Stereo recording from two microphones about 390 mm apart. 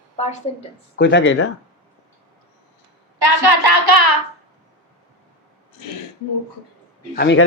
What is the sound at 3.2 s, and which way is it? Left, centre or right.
Hands, right.